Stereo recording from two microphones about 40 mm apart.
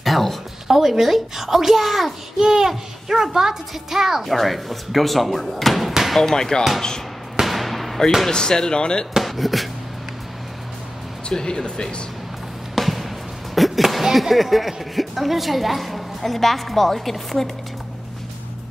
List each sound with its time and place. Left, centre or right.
0.0 s a sound: centre
0.7 s a child's voice: centre
6.1 s speech: centre
7.3 s basketball bounce: centre
8.3 s speech: centre
9.2 s speech: centre
11.2 s speech: centre
12.7 s music: centre
13.6 s a child's voice: centre